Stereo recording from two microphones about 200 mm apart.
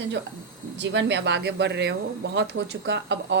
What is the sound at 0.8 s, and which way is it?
Speech, 65° right (ahead or behind).